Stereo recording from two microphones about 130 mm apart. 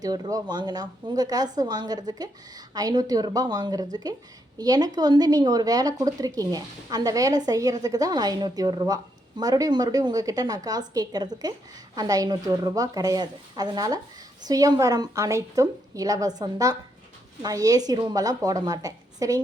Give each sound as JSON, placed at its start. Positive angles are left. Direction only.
{"t": 0.0, "sound": "a woman's voice", "side_deg": -30}